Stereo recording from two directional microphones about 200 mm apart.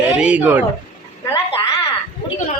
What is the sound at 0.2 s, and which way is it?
Speech, 5° right (ahead or behind).